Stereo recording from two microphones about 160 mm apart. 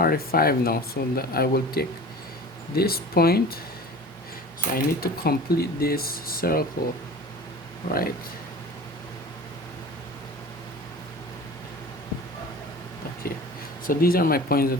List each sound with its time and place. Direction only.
0.0 s speech: 70° left (ahead or behind)
4.7 s speech: 70° left (ahead or behind)
7.9 s speech: 70° left (ahead or behind)
13.8 s speech: 65° left (ahead or behind)